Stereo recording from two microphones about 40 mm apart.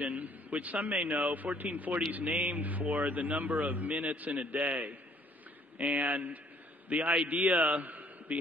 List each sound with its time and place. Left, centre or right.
0.0 s a man's voice: right
6.9 s a man's voice: right